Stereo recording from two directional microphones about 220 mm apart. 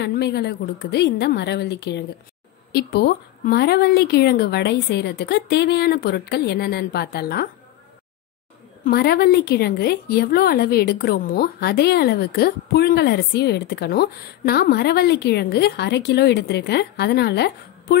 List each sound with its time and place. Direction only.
0.0 s a woman's voice: 50° left (ahead or behind)
8.8 s a woman's voice: 45° left (ahead or behind)